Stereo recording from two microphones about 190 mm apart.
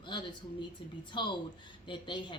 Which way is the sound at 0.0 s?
25° left (ahead or behind).